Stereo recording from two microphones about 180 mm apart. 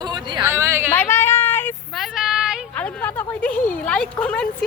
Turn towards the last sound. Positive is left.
turn(degrees=5)  # may be behind; listen again after turning